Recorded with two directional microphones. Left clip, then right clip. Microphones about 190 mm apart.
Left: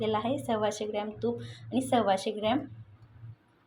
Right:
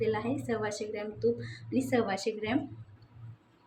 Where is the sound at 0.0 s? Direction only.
35° left (ahead or behind).